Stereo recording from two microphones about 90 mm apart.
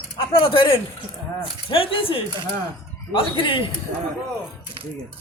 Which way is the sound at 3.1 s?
70° left (ahead or behind).